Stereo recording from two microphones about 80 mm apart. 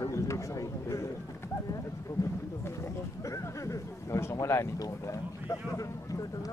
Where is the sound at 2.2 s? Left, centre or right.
Left.